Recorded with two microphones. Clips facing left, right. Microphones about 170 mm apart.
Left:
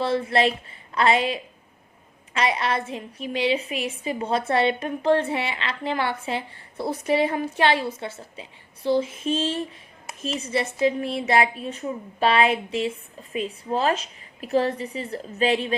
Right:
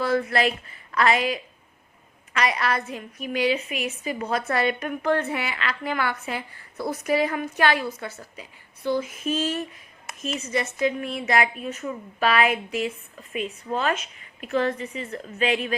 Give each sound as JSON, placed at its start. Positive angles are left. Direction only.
{"t": 0.0, "sound": "a woman's voice", "side_deg": 30}